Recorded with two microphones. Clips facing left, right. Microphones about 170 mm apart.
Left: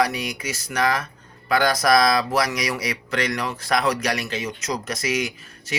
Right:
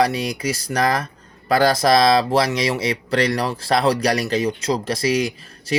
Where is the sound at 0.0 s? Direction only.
30° right (ahead or behind).